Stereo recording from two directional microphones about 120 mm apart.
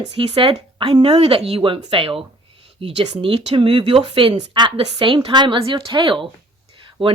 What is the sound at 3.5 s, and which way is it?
Speech, 45° right (ahead or behind).